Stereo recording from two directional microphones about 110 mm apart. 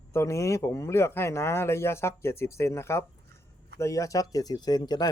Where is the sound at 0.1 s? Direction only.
25° left (ahead or behind).